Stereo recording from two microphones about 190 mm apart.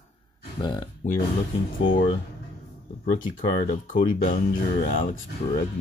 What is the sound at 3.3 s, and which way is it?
Speech, 45° left (ahead or behind).